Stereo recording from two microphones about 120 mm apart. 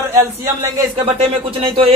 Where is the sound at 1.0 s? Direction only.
55° right (ahead or behind).